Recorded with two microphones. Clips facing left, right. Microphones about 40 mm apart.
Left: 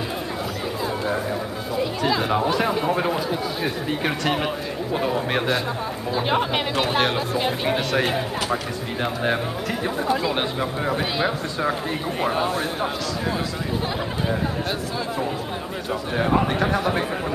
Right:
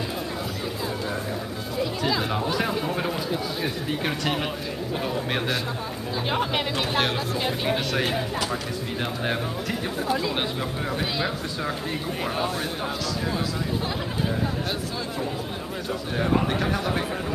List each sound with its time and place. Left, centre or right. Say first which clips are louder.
1.8 s speech: left 3 dB; centre
15.9 s speech: left 3 dB; centre